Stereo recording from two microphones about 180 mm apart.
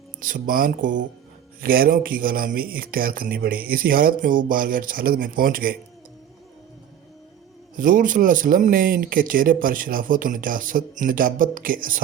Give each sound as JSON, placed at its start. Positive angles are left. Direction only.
{"t": 0.2, "sound": "speech", "side_deg": -50}
{"t": 7.8, "sound": "speech", "side_deg": -50}